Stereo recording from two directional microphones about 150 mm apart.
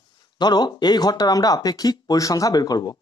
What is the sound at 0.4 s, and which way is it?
Speech, 30° left (ahead or behind).